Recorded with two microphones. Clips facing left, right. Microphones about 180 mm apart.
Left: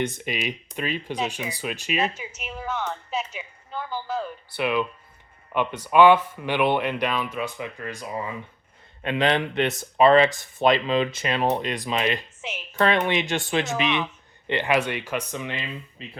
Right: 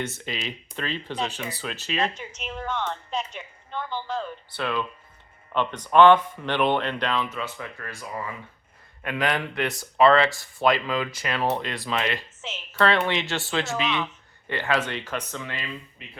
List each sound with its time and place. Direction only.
0.0 s speech: 15° left (ahead or behind)
16.0 s speech: 30° left (ahead or behind)